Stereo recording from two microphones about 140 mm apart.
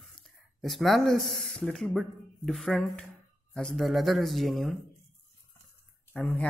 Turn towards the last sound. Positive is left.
turn(degrees=10)  # may be behind; listen again after turning